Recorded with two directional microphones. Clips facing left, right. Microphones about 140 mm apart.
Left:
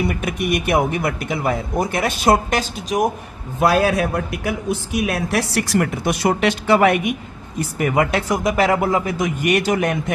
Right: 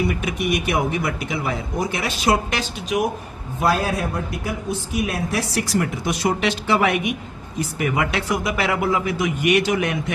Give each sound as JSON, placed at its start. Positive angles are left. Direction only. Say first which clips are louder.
{"t": 0.1, "sound": "a man's voice", "louder": "left 1 dB", "side_deg": 50}
{"t": 3.6, "sound": "a man's voice", "louder": "left 5 dB", "side_deg": 75}